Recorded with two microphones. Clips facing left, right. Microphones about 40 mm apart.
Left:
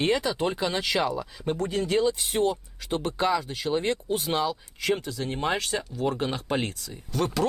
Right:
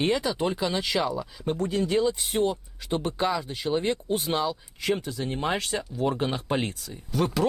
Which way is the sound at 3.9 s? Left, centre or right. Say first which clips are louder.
Even; centre.